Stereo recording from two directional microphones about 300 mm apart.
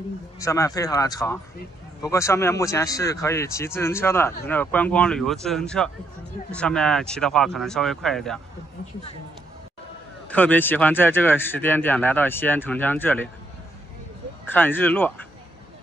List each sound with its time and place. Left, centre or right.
0.4 s speech: centre
10.3 s speech: centre
14.5 s speech: centre